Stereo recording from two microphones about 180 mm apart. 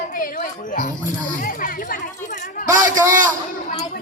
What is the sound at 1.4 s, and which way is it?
Chatter, 50° left (ahead or behind).